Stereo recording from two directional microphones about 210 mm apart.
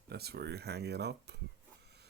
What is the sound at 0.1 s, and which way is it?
Speech, 50° right (ahead or behind).